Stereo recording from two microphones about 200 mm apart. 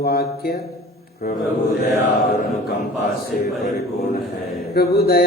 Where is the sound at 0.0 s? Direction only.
50° left (ahead or behind).